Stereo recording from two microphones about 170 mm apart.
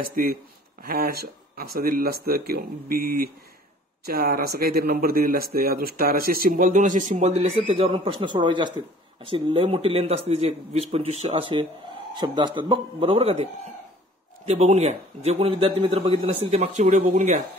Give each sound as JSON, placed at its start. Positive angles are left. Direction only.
{"t": 0.0, "sound": "a man's voice", "side_deg": -55}